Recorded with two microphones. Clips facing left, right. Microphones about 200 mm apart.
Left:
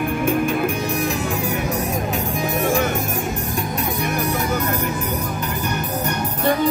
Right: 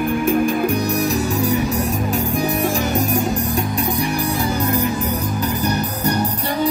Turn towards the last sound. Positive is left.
turn(degrees=-35)  # may be behind; listen again after turning